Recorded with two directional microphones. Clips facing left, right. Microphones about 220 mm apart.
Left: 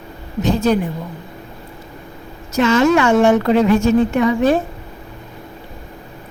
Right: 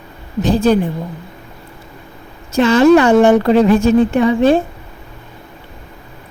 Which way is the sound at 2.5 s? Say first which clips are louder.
Right 5 dB; 30° right (ahead or behind).